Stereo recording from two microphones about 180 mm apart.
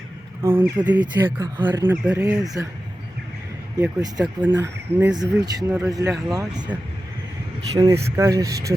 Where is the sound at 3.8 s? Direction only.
20° right (ahead or behind).